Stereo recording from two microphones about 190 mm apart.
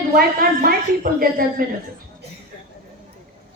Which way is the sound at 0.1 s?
50° right (ahead or behind).